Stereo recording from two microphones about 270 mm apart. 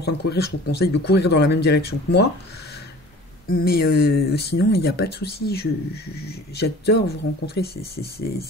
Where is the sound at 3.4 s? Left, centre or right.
Left.